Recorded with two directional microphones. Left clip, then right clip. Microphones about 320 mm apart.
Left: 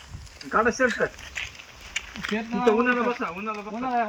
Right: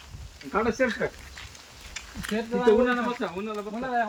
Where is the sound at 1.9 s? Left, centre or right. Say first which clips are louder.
Left 8 dB; left.